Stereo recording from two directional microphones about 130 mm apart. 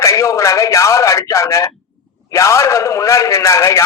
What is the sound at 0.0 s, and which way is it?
A man's voice, 20° left (ahead or behind).